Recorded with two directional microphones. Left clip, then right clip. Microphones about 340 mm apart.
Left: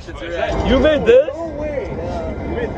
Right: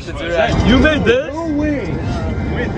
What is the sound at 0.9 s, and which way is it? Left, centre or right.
Speech, right.